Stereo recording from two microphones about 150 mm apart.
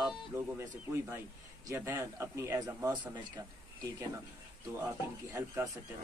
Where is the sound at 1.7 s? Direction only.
20° right (ahead or behind).